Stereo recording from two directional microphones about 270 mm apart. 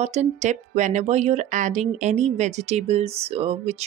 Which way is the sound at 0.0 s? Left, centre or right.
Right.